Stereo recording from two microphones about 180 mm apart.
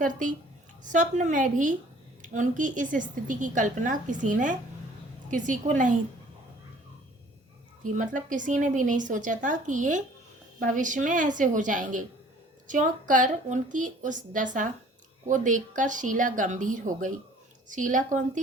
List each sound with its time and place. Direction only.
0.0 s a woman's voice: 45° right (ahead or behind)
7.9 s a woman's voice: 45° right (ahead or behind)